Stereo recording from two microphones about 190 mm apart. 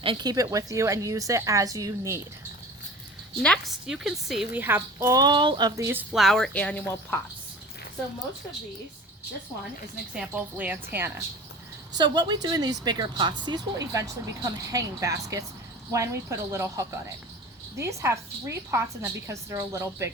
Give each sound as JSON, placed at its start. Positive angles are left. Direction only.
{"t": 0.0, "sound": "a woman's voice", "side_deg": -25}
{"t": 3.4, "sound": "a woman's voice", "side_deg": 0}
{"t": 4.6, "sound": "a woman's voice", "side_deg": -15}
{"t": 6.2, "sound": "a woman's voice", "side_deg": 0}
{"t": 10.2, "sound": "a woman's voice", "side_deg": -10}
{"t": 11.9, "sound": "a woman's voice", "side_deg": -20}